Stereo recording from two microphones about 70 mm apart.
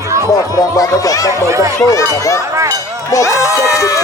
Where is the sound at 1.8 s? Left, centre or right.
Left.